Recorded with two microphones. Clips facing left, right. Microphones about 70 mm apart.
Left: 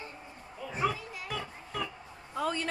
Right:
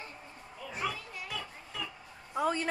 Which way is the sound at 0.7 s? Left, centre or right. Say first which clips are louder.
Left 5 dB; left.